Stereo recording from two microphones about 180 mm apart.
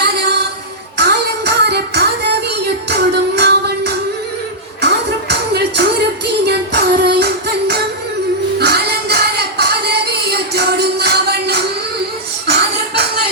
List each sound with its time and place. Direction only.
0.9 s music: 70° right (ahead or behind)